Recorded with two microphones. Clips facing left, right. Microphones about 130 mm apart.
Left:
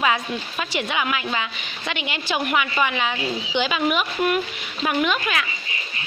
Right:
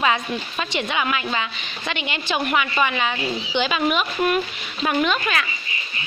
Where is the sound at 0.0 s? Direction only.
5° left (ahead or behind).